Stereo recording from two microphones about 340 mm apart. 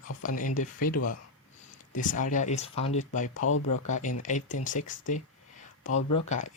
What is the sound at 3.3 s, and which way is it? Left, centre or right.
Speech, left.